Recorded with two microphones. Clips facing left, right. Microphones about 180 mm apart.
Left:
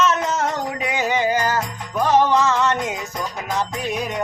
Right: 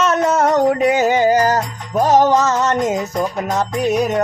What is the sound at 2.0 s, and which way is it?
Music, 40° right (ahead or behind).